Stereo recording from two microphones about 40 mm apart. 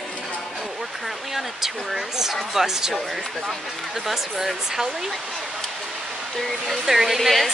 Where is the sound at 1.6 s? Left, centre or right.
Centre.